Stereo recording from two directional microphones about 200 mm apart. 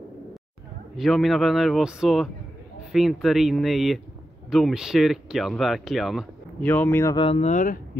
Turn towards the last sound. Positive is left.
turn(degrees=40)  # may be behind; listen again after turning